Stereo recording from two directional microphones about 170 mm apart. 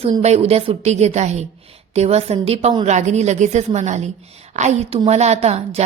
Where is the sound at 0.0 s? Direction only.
35° right (ahead or behind).